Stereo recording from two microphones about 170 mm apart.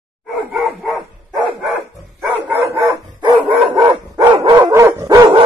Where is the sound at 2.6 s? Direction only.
20° right (ahead or behind).